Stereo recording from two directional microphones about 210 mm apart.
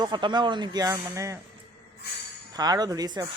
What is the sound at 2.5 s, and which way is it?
Speech, 20° right (ahead or behind).